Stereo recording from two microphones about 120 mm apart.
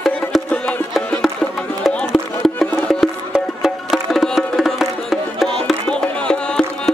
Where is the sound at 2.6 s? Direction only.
5° left (ahead or behind).